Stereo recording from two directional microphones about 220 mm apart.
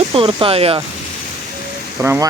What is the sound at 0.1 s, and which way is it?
Speech, 25° right (ahead or behind).